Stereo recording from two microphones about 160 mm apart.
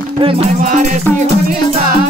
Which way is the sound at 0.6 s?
55° right (ahead or behind).